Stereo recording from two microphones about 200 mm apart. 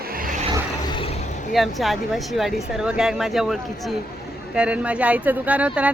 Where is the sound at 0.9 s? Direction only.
30° left (ahead or behind).